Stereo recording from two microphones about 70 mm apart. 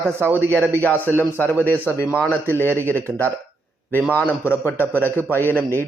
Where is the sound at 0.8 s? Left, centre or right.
Left.